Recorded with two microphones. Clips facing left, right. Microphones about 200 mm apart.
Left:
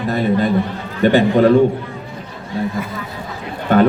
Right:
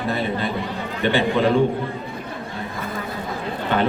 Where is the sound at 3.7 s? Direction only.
45° left (ahead or behind).